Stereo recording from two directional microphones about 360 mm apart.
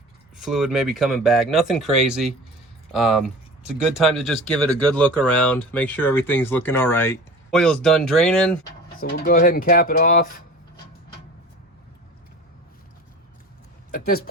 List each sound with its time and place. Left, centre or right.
0.3 s speech: centre
9.0 s speech: left
13.9 s speech: left